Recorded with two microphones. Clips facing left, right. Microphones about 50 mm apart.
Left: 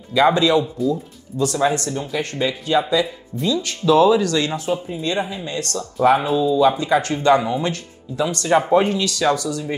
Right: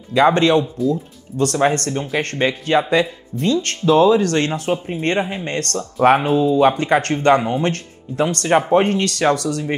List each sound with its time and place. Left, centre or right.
0.1 s speech: right